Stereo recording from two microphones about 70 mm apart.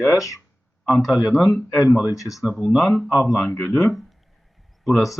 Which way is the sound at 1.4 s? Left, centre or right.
Centre.